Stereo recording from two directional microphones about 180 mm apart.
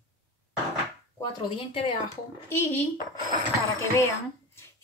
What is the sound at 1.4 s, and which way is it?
Speech, 25° left (ahead or behind).